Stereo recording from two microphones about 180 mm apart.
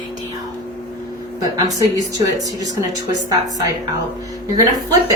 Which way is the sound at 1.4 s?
20° right (ahead or behind).